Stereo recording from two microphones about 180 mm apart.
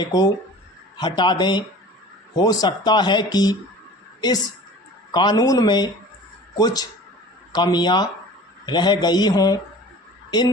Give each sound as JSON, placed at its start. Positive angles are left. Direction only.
{"t": 0.0, "sound": "speech", "side_deg": 20}
{"t": 5.1, "sound": "speech", "side_deg": 25}